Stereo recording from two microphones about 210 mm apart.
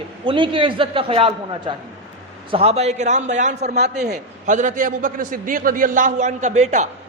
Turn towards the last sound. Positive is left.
turn(degrees=-35)  # may be behind; listen again after turning